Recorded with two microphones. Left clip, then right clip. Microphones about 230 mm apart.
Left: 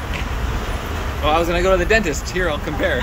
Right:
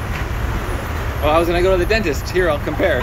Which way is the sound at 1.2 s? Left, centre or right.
Centre.